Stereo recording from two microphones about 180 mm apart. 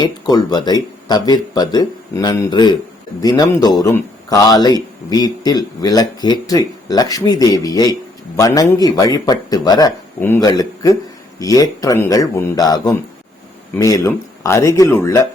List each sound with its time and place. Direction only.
0.0 s speech: 25° left (ahead or behind)